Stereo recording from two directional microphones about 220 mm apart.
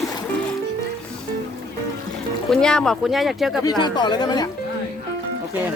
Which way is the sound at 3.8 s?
20° left (ahead or behind).